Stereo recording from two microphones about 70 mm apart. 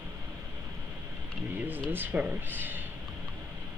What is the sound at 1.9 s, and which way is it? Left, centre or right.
Speech, right.